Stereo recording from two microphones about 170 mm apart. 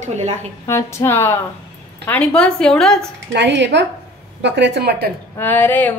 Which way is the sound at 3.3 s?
90° right.